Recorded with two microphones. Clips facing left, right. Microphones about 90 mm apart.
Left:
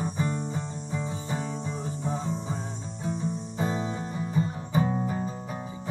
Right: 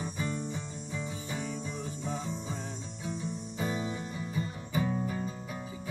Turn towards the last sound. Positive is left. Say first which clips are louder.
# left 4 dB
turn(degrees=35)  # may be behind; listen again after turning